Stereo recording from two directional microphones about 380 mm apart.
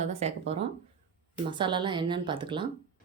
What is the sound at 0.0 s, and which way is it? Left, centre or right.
A woman's voice, centre.